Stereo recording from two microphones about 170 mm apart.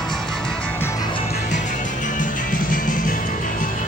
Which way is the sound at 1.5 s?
50° left (ahead or behind).